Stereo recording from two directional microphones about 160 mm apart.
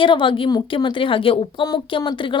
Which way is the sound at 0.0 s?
30° left (ahead or behind).